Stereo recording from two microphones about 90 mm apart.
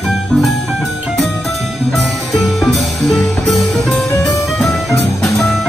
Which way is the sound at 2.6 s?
Centre (ahead or behind).